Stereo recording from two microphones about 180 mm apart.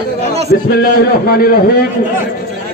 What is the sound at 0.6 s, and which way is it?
Speech, 55° left (ahead or behind).